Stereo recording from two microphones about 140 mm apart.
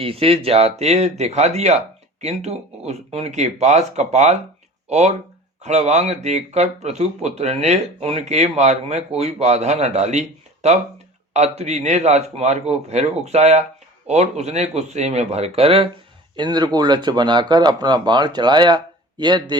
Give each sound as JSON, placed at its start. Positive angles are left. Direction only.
{"t": 0.0, "sound": "speech", "side_deg": -45}
{"t": 16.3, "sound": "speech", "side_deg": -30}